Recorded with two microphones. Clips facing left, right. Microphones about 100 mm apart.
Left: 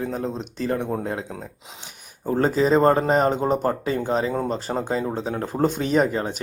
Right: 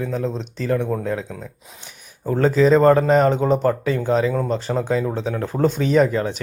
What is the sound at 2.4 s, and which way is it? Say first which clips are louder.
Speech: right 4 dB; 40° left (ahead or behind).